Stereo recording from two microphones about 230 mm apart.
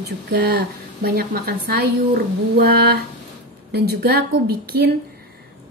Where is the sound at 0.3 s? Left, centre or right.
Right.